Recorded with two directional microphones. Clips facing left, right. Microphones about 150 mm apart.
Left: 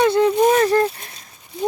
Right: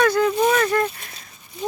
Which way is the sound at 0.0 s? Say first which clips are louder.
Left 3 dB; 25° left (ahead or behind).